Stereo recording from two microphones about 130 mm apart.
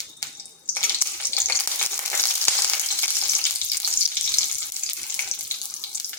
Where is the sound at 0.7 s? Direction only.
15° left (ahead or behind).